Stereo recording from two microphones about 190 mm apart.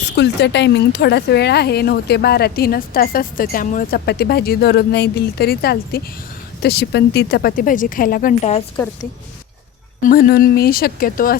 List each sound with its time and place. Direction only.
0.2 s speech: 65° left (ahead or behind); by 8.4 s 50° left (ahead or behind)
8.4 s speech: 35° left (ahead or behind)
10.0 s speech: 50° left (ahead or behind)